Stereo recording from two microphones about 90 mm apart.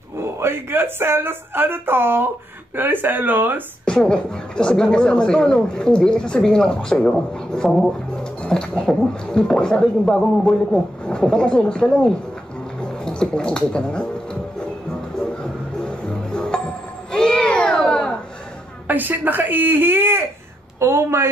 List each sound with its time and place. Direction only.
0.2 s speech: 25° right (ahead or behind)
3.8 s speech: 10° left (ahead or behind)
15.4 s music: 10° left (ahead or behind)
17.1 s a sound: 10° left (ahead or behind)
18.9 s speech: 20° right (ahead or behind)